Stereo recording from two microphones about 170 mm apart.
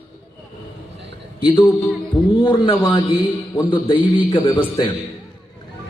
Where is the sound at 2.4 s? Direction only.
30° left (ahead or behind).